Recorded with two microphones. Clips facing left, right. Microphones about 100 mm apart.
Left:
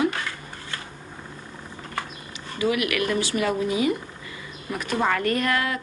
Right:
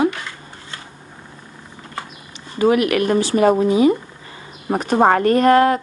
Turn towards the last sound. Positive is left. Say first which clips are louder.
# right 12 dB
turn(degrees=-40)  # may be behind; listen again after turning